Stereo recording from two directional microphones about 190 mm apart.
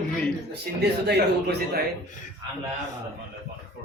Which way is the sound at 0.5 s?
60° right (ahead or behind).